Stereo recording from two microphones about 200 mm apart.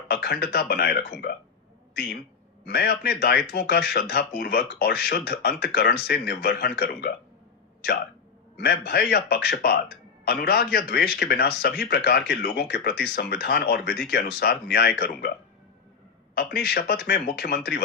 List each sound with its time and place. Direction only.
0.1 s speech: 50° left (ahead or behind)
2.6 s speech: 50° left (ahead or behind)
8.5 s speech: 50° left (ahead or behind)
16.3 s speech: 50° left (ahead or behind)